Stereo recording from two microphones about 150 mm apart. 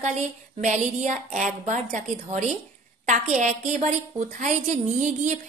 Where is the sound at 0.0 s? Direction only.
50° right (ahead or behind).